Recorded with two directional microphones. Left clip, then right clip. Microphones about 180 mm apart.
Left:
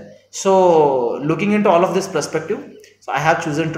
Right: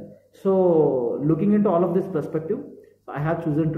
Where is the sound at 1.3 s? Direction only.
10° right (ahead or behind).